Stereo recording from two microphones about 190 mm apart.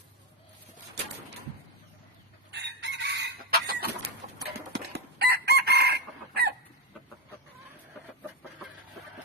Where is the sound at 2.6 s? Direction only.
70° right (ahead or behind).